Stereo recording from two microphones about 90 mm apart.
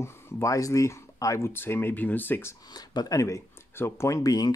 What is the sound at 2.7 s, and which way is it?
Speech, 50° left (ahead or behind).